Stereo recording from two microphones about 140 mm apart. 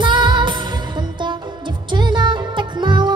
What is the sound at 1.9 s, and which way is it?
Music, 35° right (ahead or behind).